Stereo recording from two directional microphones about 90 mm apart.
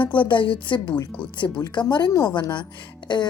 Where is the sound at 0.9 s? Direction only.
40° left (ahead or behind).